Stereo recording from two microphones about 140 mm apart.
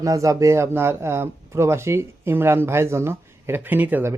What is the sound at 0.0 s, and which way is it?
Speech, 25° right (ahead or behind).